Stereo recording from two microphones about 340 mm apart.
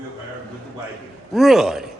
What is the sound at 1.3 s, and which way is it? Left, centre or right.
Speech, centre.